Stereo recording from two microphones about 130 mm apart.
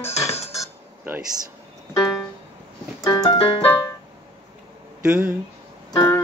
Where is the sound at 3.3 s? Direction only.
45° left (ahead or behind).